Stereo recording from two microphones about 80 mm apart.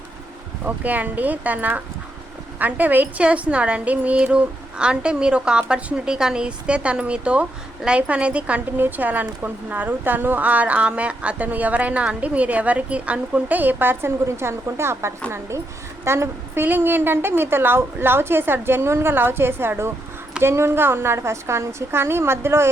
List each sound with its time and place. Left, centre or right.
0.6 s a woman's voice: right